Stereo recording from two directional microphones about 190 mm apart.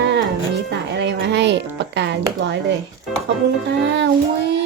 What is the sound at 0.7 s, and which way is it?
Music, 65° right (ahead or behind).